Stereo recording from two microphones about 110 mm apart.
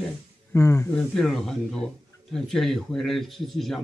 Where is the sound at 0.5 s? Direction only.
25° left (ahead or behind).